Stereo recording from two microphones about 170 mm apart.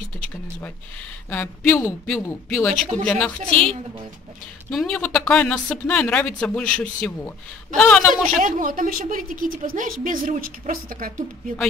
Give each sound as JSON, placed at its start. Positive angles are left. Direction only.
{"t": 1.3, "sound": "speech", "side_deg": 10}
{"t": 4.6, "sound": "speech", "side_deg": 5}
{"t": 8.1, "sound": "a woman's voice", "side_deg": -50}